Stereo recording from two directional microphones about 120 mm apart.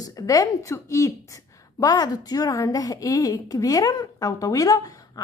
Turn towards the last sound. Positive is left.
turn(degrees=30)  # may be behind; listen again after turning